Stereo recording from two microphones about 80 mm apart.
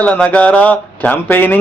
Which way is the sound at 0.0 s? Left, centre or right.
Centre.